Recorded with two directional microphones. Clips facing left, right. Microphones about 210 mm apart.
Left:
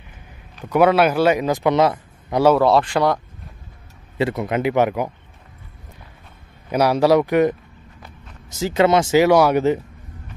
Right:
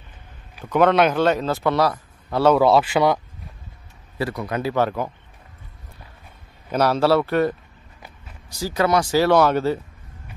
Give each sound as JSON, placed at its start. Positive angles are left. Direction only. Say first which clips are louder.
{"t": 0.7, "sound": "a man's voice", "louder": "left 2 dB", "side_deg": 10}
{"t": 2.4, "sound": "speech", "louder": "left 1 dB", "side_deg": 0}
{"t": 4.2, "sound": "speech", "louder": "left 4 dB", "side_deg": 20}
{"t": 6.7, "sound": "a man's voice", "louder": "left 3 dB", "side_deg": 10}